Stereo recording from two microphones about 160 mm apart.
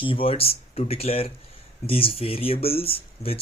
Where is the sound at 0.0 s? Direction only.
35° left (ahead or behind).